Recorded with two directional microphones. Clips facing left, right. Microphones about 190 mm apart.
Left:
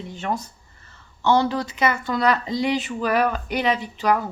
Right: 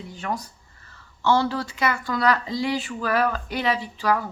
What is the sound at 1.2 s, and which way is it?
Speech, 20° left (ahead or behind).